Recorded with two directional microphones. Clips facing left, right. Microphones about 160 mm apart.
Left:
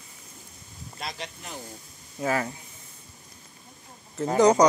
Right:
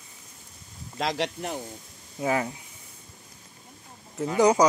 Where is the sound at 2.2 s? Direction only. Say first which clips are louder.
Right 1 dB; 15° right (ahead or behind).